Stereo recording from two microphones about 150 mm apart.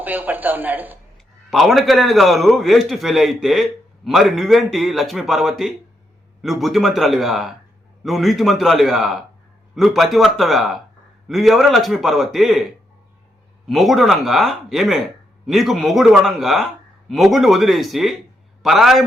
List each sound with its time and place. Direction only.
0.0 s speech: 10° right (ahead or behind)
1.5 s a man's voice: centre (ahead or behind)
13.7 s a man's voice: centre (ahead or behind)